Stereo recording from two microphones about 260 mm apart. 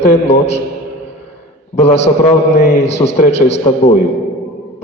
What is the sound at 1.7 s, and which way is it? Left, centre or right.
Speech, left.